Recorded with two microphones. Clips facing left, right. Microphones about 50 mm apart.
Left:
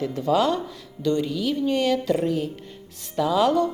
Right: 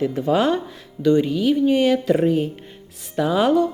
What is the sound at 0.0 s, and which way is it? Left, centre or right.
Speech, right.